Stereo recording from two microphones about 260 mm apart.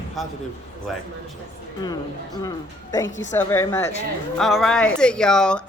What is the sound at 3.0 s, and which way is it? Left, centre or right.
Speech, left.